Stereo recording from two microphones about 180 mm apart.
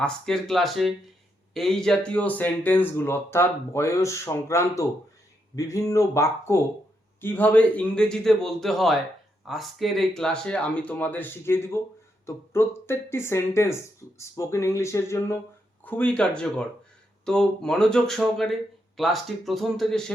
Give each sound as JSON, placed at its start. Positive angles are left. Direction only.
{"t": 0.0, "sound": "speech", "side_deg": 5}